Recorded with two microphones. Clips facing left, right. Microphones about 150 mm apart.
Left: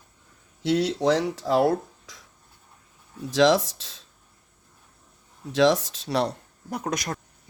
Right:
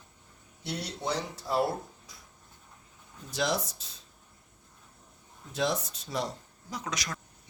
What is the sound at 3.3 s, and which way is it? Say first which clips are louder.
Speech: left 11 dB; 90° left.